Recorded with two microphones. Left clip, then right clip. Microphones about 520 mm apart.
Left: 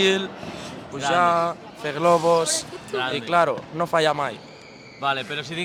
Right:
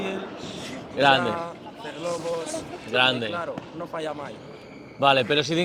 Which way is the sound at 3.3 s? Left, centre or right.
Left.